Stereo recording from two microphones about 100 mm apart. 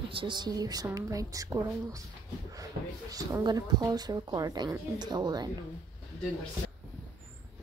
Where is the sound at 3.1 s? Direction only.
40° right (ahead or behind).